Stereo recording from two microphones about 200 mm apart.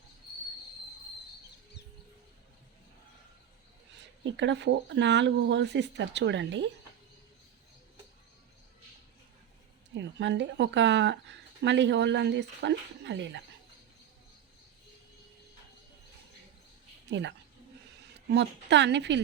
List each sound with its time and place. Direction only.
4.2 s speech: 65° right (ahead or behind)
9.9 s speech: 65° right (ahead or behind)
17.1 s speech: 60° right (ahead or behind)